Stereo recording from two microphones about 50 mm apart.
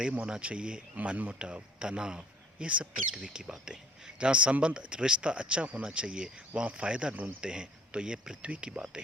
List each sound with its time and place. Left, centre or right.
0.3 s speech: centre
3.1 s speech: centre
8.4 s speech: right